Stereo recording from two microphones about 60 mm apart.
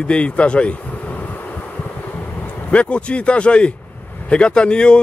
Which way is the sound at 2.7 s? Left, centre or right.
Centre.